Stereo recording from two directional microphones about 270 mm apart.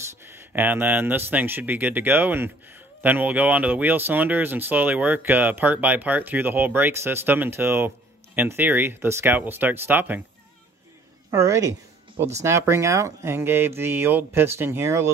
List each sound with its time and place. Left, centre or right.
0.2 s a man's voice: centre
11.2 s a woman's voice: centre